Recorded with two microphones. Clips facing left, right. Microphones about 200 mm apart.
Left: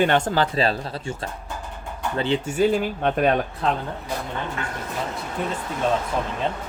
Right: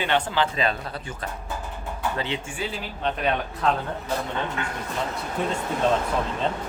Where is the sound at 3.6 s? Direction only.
30° left (ahead or behind).